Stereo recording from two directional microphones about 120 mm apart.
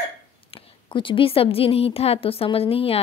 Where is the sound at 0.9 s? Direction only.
45° left (ahead or behind).